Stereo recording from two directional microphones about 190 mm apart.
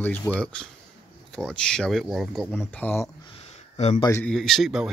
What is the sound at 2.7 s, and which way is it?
Speech, 10° left (ahead or behind).